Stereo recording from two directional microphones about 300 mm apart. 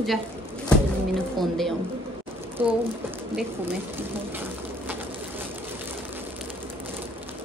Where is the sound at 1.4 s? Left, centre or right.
Centre.